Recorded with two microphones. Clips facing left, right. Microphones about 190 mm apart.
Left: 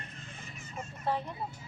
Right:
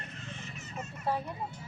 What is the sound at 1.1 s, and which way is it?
Speech, 5° right (ahead or behind).